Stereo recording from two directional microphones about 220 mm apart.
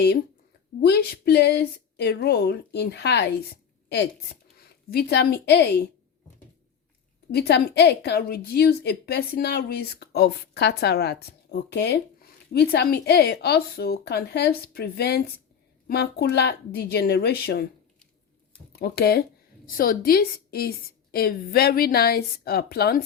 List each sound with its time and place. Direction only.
0.8 s a woman's voice: 45° left (ahead or behind)
7.3 s a woman's voice: 45° left (ahead or behind)
18.7 s a woman's voice: 45° left (ahead or behind)